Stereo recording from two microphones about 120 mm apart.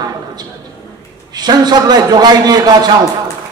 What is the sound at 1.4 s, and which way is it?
A man's voice, 35° right (ahead or behind).